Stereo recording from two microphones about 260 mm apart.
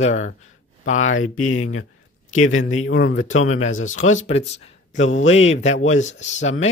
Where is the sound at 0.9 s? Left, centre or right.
Left.